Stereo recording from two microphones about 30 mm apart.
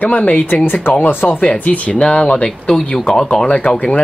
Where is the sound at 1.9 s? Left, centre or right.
Left.